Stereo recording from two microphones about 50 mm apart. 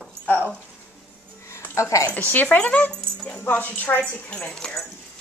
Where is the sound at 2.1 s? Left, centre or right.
Left.